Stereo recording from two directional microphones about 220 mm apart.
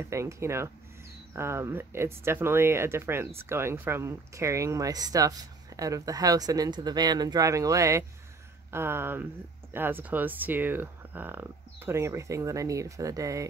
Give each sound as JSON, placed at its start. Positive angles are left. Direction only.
{"t": 0.0, "sound": "speech", "side_deg": -15}